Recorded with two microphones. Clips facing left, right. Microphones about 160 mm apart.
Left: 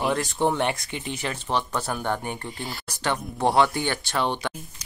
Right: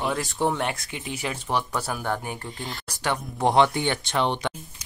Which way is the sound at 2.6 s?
5° left (ahead or behind).